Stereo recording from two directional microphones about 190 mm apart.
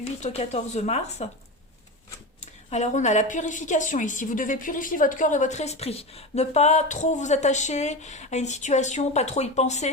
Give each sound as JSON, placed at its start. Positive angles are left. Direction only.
{"t": 0.0, "sound": "a woman's voice", "side_deg": 35}
{"t": 2.4, "sound": "a woman's voice", "side_deg": 35}